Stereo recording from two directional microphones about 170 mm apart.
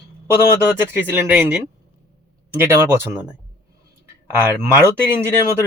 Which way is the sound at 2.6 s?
15° right (ahead or behind).